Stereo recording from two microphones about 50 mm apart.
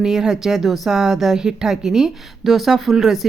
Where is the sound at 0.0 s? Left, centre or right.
Centre.